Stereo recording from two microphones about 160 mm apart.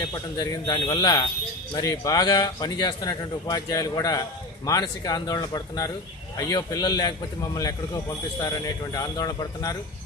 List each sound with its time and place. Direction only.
0.1 s a man's voice: 25° left (ahead or behind)